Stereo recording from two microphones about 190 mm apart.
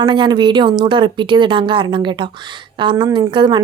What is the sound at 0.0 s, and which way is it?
Speech, 25° right (ahead or behind).